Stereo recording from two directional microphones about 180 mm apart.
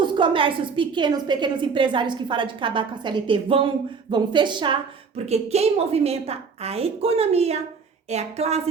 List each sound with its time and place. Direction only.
0.0 s a woman's voice: 25° right (ahead or behind)